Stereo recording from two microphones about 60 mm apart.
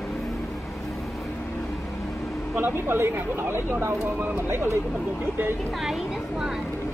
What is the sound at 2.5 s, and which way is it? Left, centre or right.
Speech, right.